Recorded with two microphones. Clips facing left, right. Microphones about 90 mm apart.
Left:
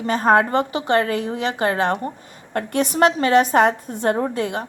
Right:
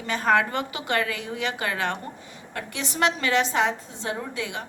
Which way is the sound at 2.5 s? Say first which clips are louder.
Left 11 dB; 50° left (ahead or behind).